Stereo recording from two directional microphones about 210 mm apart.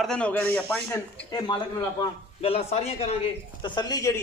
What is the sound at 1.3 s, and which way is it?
A man's voice, 20° left (ahead or behind).